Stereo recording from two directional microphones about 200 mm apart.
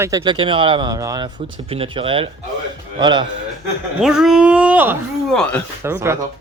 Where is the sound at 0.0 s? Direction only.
20° right (ahead or behind).